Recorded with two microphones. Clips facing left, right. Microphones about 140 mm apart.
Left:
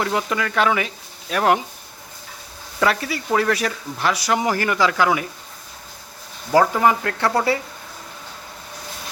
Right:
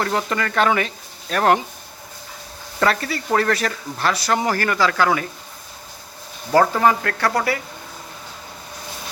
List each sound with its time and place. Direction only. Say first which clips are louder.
0.0 s speech: even; 5° left (ahead or behind)
2.8 s speech: even; 10° left (ahead or behind)
6.5 s speech: even; 10° left (ahead or behind)